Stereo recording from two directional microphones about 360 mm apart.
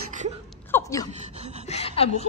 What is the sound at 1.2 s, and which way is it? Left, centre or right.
Gasp, centre.